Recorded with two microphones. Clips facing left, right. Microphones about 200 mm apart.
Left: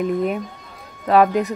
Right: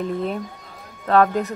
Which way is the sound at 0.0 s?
15° left (ahead or behind).